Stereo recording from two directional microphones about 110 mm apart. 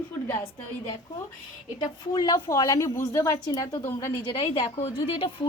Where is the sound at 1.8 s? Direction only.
40° left (ahead or behind).